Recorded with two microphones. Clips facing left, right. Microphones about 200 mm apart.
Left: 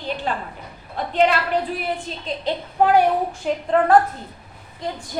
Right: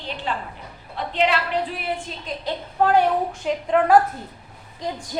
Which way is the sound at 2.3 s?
15° left (ahead or behind).